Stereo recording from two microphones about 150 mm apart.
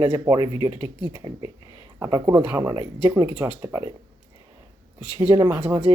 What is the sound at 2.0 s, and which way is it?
Speech, 25° right (ahead or behind).